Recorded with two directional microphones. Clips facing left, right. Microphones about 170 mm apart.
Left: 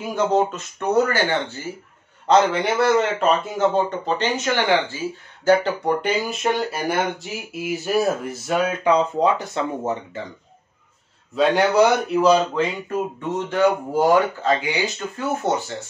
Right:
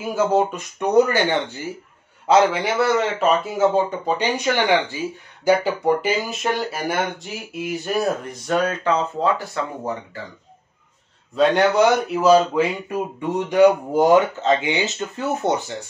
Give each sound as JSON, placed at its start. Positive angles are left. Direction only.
{"t": 0.1, "sound": "a man's voice", "side_deg": -5}
{"t": 2.2, "sound": "a man's voice", "side_deg": -5}
{"t": 11.3, "sound": "speech", "side_deg": 0}
{"t": 13.2, "sound": "speech", "side_deg": -15}